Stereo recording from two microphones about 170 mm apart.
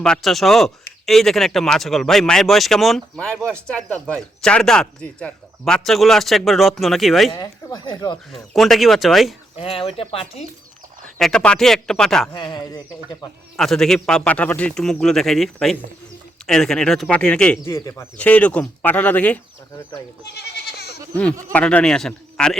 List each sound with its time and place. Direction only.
0.0 s speech: centre (ahead or behind)
7.3 s speech: 20° left (ahead or behind)
8.5 s speech: centre (ahead or behind)
9.6 s speech: 35° left (ahead or behind)
11.2 s speech: 5° left (ahead or behind)
12.3 s speech: 25° left (ahead or behind)
13.6 s speech: centre (ahead or behind)
17.7 s speech: 15° left (ahead or behind)
20.3 s goat: 70° left (ahead or behind)
21.5 s speech: 10° left (ahead or behind)